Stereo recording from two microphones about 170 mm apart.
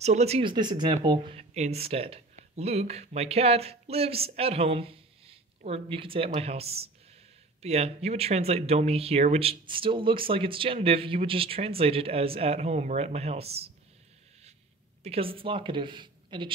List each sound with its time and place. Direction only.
0.0 s speech: 40° right (ahead or behind)
1.5 s speech: 40° right (ahead or behind)
15.0 s speech: 35° right (ahead or behind)